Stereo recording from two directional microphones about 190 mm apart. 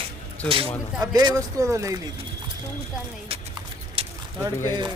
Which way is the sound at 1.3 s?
15° right (ahead or behind).